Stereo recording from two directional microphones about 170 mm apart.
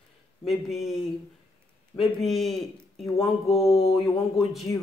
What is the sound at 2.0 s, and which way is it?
Speech, centre (ahead or behind).